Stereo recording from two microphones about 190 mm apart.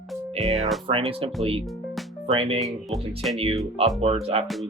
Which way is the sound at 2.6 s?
Centre (ahead or behind).